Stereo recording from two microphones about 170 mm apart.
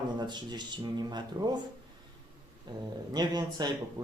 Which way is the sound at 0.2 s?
25° right (ahead or behind).